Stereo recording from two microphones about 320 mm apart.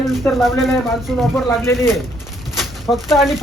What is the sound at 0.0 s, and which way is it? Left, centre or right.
Speech, centre.